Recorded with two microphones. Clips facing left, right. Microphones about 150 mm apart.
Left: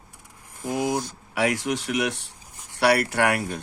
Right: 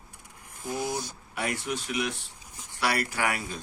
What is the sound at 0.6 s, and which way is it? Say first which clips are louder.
A man's voice: left 6 dB; 70° left (ahead or behind).